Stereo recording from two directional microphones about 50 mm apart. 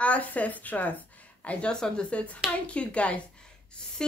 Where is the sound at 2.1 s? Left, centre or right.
Left.